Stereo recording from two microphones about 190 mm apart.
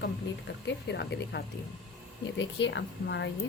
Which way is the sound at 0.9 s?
60° left (ahead or behind).